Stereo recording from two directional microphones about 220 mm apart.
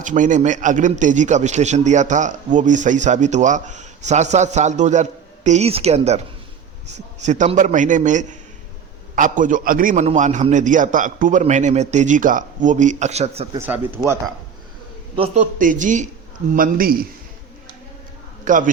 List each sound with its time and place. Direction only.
0.0 s a man's voice: 35° right (ahead or behind)
13.6 s speech: 10° right (ahead or behind)
15.5 s a man's voice: 35° right (ahead or behind)
18.4 s a man's voice: 35° right (ahead or behind)